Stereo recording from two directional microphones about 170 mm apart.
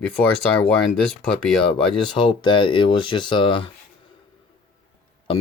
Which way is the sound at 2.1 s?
30° left (ahead or behind).